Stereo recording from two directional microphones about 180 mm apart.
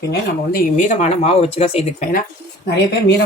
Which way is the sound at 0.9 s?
40° left (ahead or behind).